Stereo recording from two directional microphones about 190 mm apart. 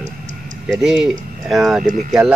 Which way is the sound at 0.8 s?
Centre (ahead or behind).